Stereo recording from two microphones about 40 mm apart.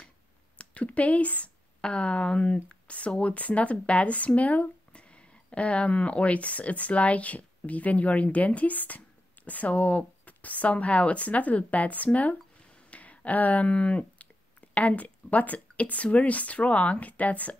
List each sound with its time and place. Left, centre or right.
0.6 s speech: left
1.8 s speech: left
4.9 s speech: left
9.8 s speech: left
12.7 s a sound: left
13.7 s speech: left